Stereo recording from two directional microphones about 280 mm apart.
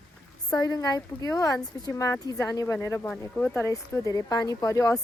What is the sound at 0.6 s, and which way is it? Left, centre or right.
A woman's voice, centre.